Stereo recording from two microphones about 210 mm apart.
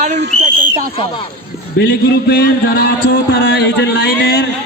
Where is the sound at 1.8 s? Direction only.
50° left (ahead or behind).